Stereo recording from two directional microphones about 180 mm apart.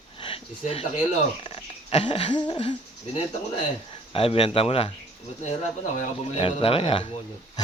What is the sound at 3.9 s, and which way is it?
Speech, 30° left (ahead or behind).